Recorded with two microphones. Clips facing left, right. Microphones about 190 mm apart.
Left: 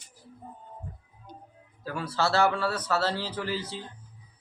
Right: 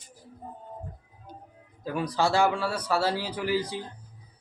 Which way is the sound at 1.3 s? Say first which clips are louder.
Right 1 dB; 5° right (ahead or behind).